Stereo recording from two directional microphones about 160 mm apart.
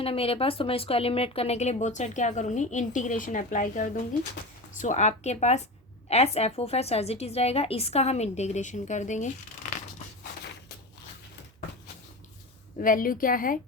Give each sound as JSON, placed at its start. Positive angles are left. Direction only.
{"t": 0.0, "sound": "a woman's voice", "side_deg": 35}
{"t": 12.8, "sound": "a woman's voice", "side_deg": 60}